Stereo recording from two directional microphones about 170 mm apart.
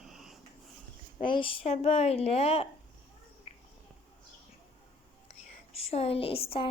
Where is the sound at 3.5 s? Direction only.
35° left (ahead or behind).